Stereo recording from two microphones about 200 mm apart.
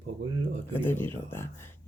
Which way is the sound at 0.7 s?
10° left (ahead or behind).